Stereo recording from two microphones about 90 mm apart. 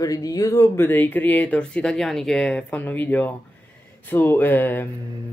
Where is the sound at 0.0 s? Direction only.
40° left (ahead or behind).